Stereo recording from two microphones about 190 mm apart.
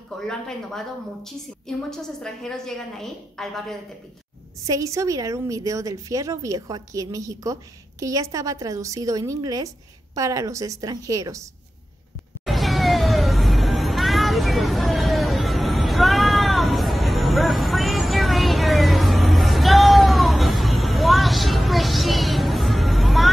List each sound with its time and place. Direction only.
0.2 s a woman's voice: 5° left (ahead or behind)
4.6 s a woman's voice: 15° right (ahead or behind)
12.4 s music: centre (ahead or behind)